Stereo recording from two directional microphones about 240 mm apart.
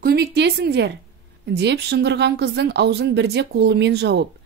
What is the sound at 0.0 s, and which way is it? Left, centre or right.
A woman's voice, right.